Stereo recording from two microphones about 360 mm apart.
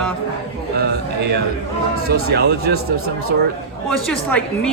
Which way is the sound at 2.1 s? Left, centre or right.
Right.